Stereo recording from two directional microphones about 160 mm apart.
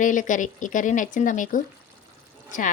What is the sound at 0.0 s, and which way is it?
Speech, 55° left (ahead or behind).